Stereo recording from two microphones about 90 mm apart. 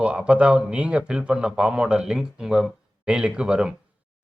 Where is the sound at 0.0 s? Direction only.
15° right (ahead or behind).